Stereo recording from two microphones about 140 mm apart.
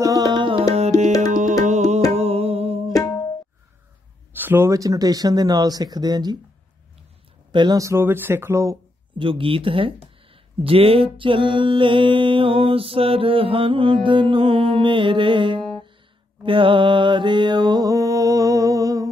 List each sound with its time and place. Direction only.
0.3 s music: 35° right (ahead or behind)
0.7 s music: 50° right (ahead or behind)
2.9 s music: 25° left (ahead or behind)
4.3 s speech: 15° right (ahead or behind); by 6.3 s 30° right (ahead or behind)
7.5 s speech: 30° right (ahead or behind)
9.2 s speech: 40° right (ahead or behind)
16.4 s mantra: 35° right (ahead or behind)